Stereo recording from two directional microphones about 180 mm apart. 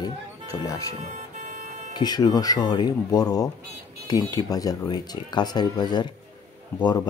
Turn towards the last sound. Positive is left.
turn(degrees=25)  # may be behind; listen again after turning